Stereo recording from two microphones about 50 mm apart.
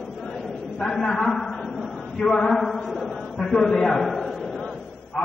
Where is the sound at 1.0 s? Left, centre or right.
Centre.